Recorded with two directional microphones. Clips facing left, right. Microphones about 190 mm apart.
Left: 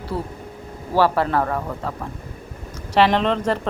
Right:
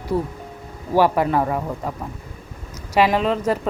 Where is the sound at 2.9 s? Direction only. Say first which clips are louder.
Even; 5° right (ahead or behind).